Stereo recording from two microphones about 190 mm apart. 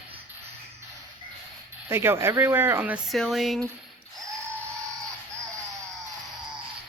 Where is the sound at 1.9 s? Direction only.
15° right (ahead or behind).